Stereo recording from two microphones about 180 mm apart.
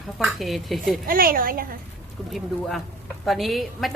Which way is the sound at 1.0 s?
55° right (ahead or behind).